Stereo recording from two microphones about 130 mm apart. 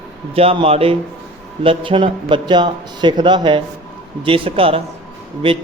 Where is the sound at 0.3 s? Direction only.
50° right (ahead or behind).